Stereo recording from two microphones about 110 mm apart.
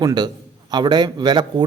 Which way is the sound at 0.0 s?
40° right (ahead or behind).